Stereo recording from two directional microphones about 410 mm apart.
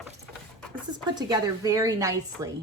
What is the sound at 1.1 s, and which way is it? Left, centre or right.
A woman's voice, centre.